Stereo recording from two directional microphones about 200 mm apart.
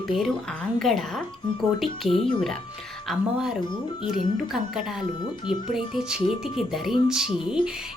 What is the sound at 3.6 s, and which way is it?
Speech, 25° left (ahead or behind).